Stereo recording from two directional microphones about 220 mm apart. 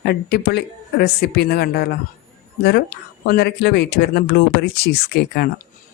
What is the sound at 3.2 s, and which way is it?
Speech, 45° left (ahead or behind).